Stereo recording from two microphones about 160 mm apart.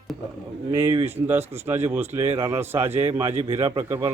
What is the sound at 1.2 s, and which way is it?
Speech, 10° right (ahead or behind).